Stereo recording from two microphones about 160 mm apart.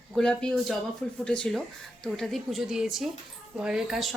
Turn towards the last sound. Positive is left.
turn(degrees=0)  # may be behind; listen again after turning